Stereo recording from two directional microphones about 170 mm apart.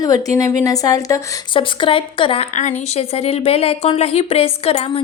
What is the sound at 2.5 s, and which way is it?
A woman's voice, 40° left (ahead or behind).